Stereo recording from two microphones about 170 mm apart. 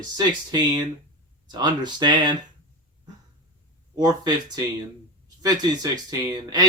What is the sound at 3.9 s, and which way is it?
Speech, 25° right (ahead or behind).